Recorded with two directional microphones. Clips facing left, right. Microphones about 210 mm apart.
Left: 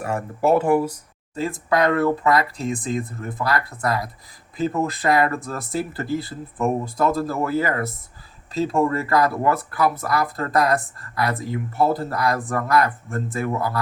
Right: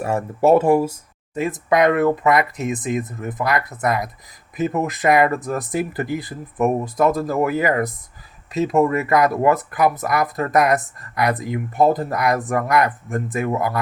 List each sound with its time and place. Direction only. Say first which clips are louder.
0.0 s speech: right 4 dB; 25° right (ahead or behind)